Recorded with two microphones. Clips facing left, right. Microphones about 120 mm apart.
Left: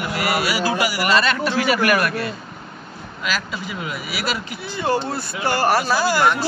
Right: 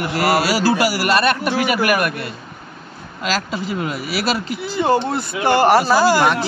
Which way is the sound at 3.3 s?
40° right (ahead or behind).